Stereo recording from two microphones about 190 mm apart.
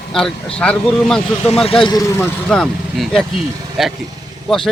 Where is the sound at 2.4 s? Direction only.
5° left (ahead or behind).